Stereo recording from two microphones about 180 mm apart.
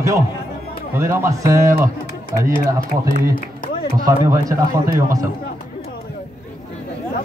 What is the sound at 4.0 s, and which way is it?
A man's voice, 20° right (ahead or behind).